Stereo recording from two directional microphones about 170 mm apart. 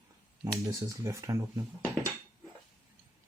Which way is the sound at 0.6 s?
15° right (ahead or behind).